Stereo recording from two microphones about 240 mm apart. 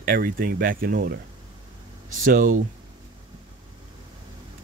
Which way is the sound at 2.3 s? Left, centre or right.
Right.